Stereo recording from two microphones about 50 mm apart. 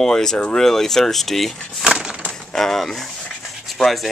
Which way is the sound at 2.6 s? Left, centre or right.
Centre.